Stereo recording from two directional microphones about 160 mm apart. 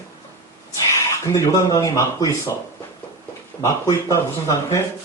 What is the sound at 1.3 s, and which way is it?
Speech, 20° left (ahead or behind).